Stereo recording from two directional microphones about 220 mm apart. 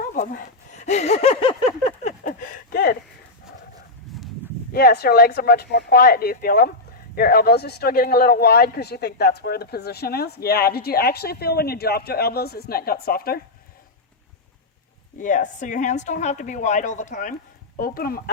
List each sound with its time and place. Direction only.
0.1 s a sound: 40° left (ahead or behind)
4.1 s livestock: centre (ahead or behind)
4.7 s speech: 45° left (ahead or behind)
15.2 s a woman's voice: 35° left (ahead or behind)